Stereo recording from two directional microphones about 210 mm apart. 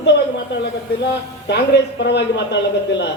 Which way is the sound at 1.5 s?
55° left (ahead or behind).